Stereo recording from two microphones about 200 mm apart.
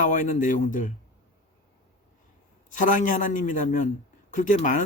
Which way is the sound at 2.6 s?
40° left (ahead or behind).